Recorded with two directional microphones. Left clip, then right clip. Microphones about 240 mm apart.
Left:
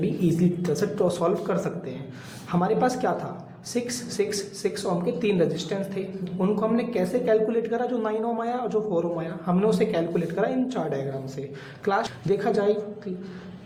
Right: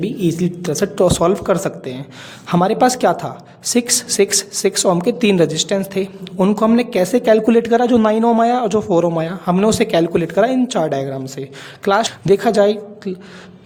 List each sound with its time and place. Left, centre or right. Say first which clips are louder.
0.0 s speech: right 6 dB; right